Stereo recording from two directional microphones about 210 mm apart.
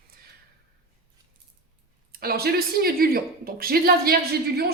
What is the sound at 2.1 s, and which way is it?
A woman's voice, 45° right (ahead or behind).